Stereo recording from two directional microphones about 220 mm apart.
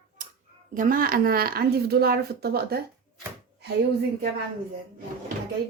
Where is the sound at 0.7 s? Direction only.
40° right (ahead or behind).